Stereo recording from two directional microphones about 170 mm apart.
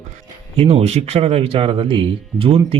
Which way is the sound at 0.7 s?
35° right (ahead or behind).